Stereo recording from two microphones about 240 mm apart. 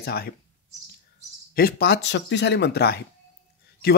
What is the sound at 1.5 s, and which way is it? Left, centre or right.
Speech, left.